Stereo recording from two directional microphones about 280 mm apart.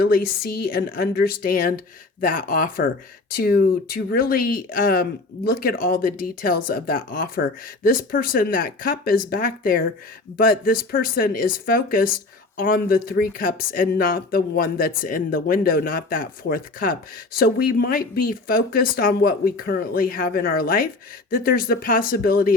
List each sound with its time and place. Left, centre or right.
0.0 s speech: left